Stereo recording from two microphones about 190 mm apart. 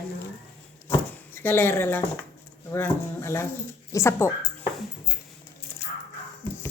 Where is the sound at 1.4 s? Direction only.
10° left (ahead or behind).